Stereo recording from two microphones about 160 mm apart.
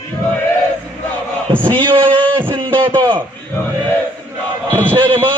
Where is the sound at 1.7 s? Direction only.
30° right (ahead or behind).